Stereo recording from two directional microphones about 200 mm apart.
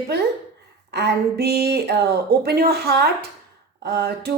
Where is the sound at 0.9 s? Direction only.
55° right (ahead or behind).